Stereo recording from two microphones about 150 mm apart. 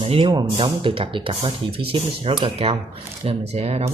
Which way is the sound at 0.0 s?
35° right (ahead or behind).